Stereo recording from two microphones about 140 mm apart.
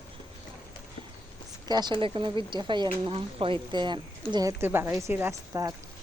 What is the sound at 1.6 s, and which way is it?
Speech, 30° right (ahead or behind).